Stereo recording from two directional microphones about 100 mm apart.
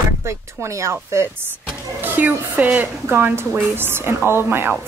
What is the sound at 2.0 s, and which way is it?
A woman's voice, 20° right (ahead or behind).